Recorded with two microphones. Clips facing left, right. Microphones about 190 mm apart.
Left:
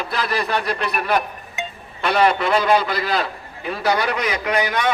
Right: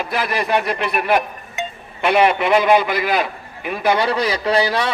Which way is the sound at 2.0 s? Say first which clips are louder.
Right 2 dB; 15° right (ahead or behind).